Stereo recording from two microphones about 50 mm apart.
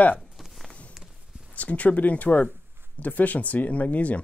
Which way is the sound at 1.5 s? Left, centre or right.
Left.